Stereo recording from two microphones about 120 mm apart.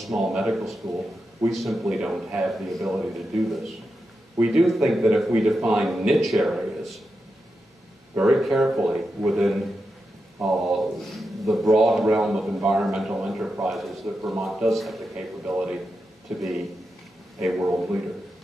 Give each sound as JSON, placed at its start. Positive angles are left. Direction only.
{"t": 0.0, "sound": "speech", "side_deg": 0}
{"t": 8.2, "sound": "speech", "side_deg": 0}
{"t": 15.5, "sound": "a man's voice", "side_deg": -10}
{"t": 17.5, "sound": "a man's voice", "side_deg": -5}